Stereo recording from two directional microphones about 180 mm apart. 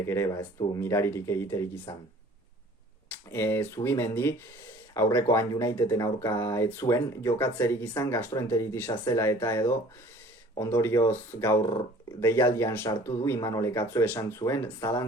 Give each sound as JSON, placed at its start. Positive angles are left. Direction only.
{"t": 0.0, "sound": "speech", "side_deg": 15}
{"t": 3.2, "sound": "speech", "side_deg": 15}